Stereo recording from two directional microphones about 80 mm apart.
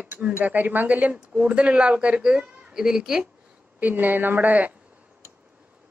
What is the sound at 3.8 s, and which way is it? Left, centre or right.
Speech, right.